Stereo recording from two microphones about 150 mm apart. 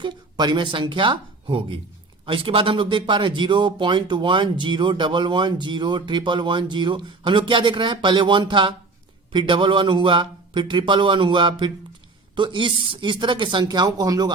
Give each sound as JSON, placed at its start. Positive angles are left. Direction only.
{"t": 0.0, "sound": "speech", "side_deg": -30}